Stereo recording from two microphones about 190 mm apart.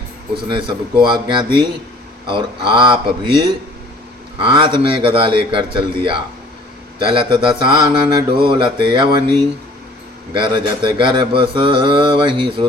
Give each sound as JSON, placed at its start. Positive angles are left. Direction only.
{"t": 0.4, "sound": "mantra", "side_deg": -25}
{"t": 10.3, "sound": "mantra", "side_deg": -25}